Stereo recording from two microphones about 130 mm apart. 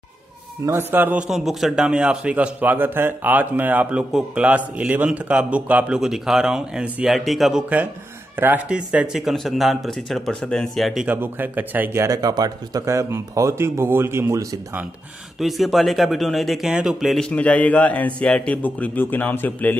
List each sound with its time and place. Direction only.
0.7 s a man's voice: 15° right (ahead or behind)
8.4 s speech: 15° right (ahead or behind)
11.1 s speech: 15° right (ahead or behind)
15.3 s speech: centre (ahead or behind); by 19.8 s 15° left (ahead or behind)